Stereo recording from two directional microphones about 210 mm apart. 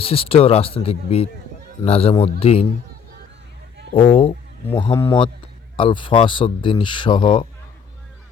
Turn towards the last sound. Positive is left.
turn(degrees=25)  # may be behind; listen again after turning